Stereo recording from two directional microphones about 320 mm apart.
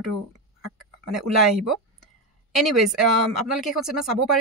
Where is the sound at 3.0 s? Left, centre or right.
Right.